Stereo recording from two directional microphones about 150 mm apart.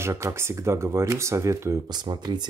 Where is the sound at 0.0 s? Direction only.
15° right (ahead or behind).